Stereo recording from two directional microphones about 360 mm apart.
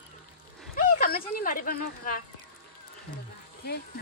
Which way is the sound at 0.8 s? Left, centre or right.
Left.